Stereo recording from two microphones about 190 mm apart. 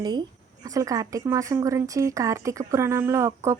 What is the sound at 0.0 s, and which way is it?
A woman's voice, 20° right (ahead or behind).